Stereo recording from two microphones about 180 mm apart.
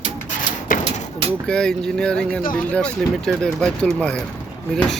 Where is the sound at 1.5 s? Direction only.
5° left (ahead or behind).